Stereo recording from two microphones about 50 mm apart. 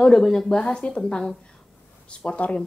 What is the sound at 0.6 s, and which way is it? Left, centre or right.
Speech, left.